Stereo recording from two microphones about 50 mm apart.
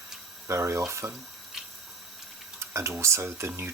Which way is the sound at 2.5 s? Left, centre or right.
Right.